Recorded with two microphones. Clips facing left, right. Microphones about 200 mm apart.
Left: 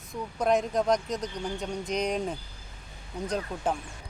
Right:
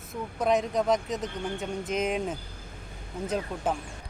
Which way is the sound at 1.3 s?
55° right (ahead or behind).